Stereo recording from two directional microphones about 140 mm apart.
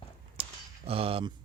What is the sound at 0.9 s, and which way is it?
Speech, 45° right (ahead or behind).